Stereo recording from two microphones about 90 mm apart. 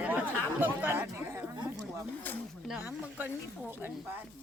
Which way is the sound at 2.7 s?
20° right (ahead or behind).